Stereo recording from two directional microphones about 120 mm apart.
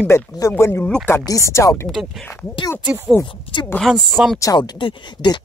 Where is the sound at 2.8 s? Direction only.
15° right (ahead or behind).